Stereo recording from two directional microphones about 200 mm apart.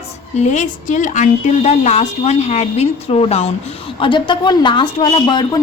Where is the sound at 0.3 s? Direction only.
35° left (ahead or behind).